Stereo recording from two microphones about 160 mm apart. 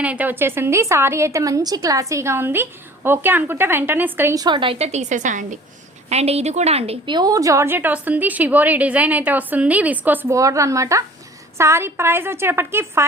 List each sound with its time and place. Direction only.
0.0 s a woman's voice: 10° right (ahead or behind)
4.4 s a woman's voice: 30° right (ahead or behind); by 5.5 s 50° right (ahead or behind)
6.1 s a woman's voice: 40° right (ahead or behind)
7.2 s a woman's voice: 20° right (ahead or behind)